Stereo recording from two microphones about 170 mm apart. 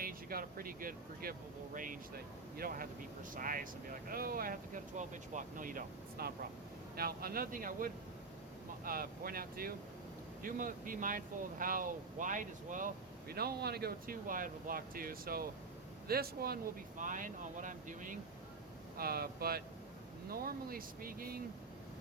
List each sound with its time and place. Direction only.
0.0 s speech: 60° right (ahead or behind)
17.0 s speech: 50° right (ahead or behind)
18.9 s speech: 65° right (ahead or behind)